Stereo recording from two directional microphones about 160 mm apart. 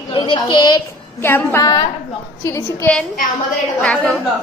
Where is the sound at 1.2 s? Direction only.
15° left (ahead or behind).